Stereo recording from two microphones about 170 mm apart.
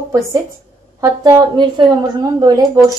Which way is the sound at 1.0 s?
20° right (ahead or behind).